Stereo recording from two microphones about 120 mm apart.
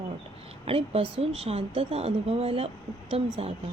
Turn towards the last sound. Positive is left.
turn(degrees=-55)  # may be behind; listen again after turning